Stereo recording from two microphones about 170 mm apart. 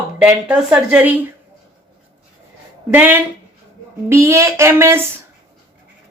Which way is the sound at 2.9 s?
10° right (ahead or behind).